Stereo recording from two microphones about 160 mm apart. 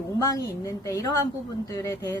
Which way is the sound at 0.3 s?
20° left (ahead or behind).